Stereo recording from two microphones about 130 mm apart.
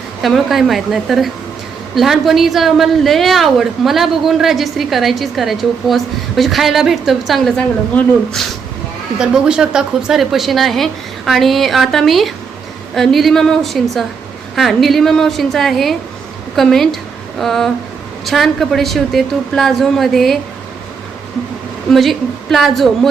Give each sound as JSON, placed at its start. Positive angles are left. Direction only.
{"t": 0.2, "sound": "a woman's voice", "side_deg": 0}
{"t": 21.9, "sound": "a woman's voice", "side_deg": 0}